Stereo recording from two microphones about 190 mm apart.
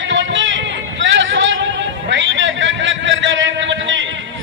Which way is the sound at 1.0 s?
75° right (ahead or behind).